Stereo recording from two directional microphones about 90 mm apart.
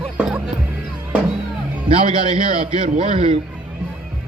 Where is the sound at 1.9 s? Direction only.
85° right.